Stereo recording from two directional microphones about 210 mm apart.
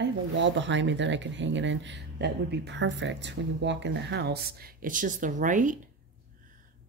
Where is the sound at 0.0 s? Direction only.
60° right (ahead or behind); by 5.8 s 40° right (ahead or behind).